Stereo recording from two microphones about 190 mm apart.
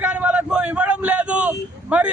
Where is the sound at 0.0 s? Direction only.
10° right (ahead or behind).